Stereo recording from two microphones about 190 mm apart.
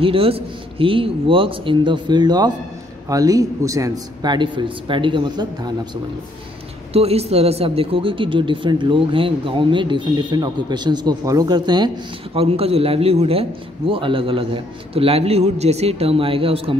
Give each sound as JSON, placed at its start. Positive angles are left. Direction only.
{"t": 0.0, "sound": "a man's voice", "side_deg": -30}
{"t": 6.9, "sound": "a man's voice", "side_deg": -30}